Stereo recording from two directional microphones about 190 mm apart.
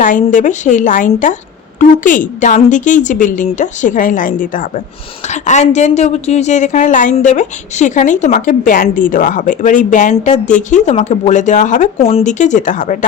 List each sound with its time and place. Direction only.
0.0 s a woman's voice: 45° left (ahead or behind)